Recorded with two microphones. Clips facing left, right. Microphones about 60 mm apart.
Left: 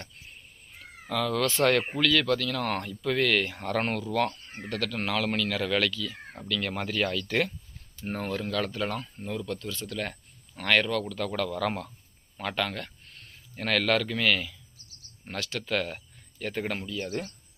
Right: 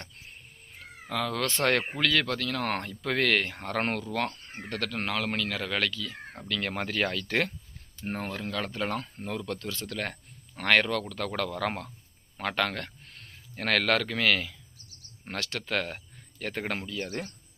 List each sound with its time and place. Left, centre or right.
1.1 s speech: right
8.0 s speech: right
9.0 s speech: right